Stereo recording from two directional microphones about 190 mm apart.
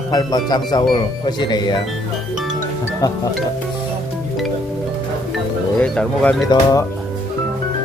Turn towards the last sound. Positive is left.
turn(degrees=20)  # may be behind; listen again after turning